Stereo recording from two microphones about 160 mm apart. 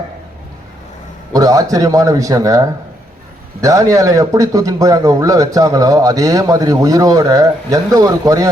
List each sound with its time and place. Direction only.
1.3 s speech: 20° right (ahead or behind)